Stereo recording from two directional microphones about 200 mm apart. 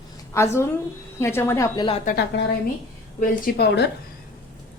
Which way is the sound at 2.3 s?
60° left (ahead or behind).